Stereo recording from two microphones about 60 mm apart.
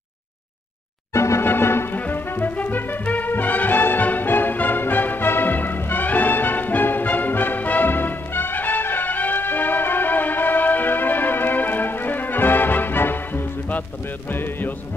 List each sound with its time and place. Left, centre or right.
1.1 s music: left
1.4 s music: left
2.0 s brass instrument: left
14.3 s music: left